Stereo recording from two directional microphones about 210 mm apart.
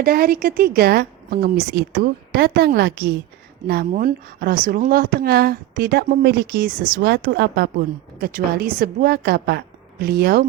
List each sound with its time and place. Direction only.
0.0 s speech: 45° right (ahead or behind)